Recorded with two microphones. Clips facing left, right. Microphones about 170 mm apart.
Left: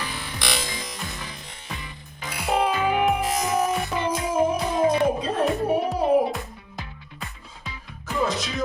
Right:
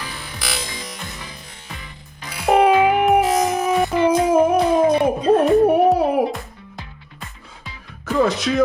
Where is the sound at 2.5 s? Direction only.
65° right (ahead or behind).